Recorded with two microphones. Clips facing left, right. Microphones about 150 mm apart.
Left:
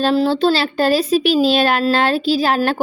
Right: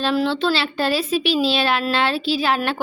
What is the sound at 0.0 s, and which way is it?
A woman's voice, 35° left (ahead or behind).